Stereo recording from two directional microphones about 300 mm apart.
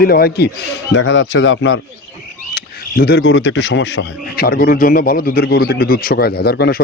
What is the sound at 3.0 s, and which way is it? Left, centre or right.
Speech, left.